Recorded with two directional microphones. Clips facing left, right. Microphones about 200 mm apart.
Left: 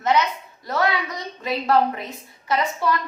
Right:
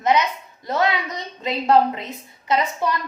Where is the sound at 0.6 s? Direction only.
20° right (ahead or behind).